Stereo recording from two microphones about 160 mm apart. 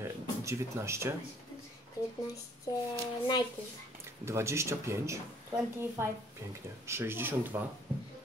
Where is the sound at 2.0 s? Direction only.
20° left (ahead or behind).